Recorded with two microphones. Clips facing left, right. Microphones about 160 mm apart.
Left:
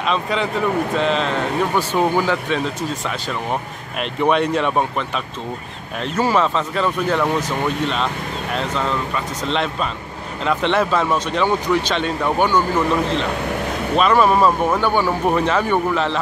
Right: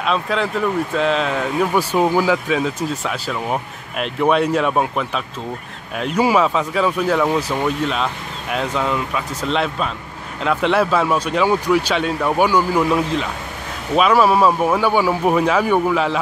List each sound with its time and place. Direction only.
0.0 s speech: centre (ahead or behind)